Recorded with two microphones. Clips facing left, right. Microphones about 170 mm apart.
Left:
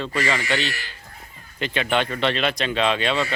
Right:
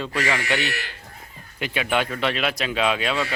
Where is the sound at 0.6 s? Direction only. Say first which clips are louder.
Right 1 dB; 65° right (ahead or behind).